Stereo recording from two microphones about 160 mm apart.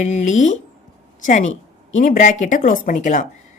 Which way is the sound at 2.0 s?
55° left (ahead or behind).